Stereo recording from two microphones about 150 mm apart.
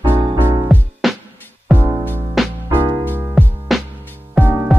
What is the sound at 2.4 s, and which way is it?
Music, centre (ahead or behind).